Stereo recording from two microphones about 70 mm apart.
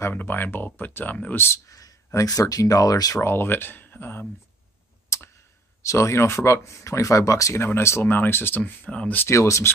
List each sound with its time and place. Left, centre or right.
0.1 s speech: left
1.7 s a sound: left
2.2 s speech: left
3.2 s speech: left
5.1 s tick: left
5.8 s speech: left; by 9.2 s centre
9.3 s speech: left